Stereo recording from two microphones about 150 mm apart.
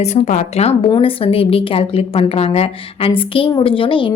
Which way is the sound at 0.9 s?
35° left (ahead or behind).